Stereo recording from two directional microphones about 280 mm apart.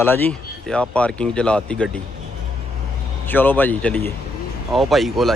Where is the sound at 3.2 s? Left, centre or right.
Centre.